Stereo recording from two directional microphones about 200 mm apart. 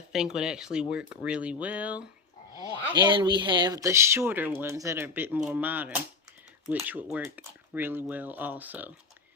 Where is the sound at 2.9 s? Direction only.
20° right (ahead or behind).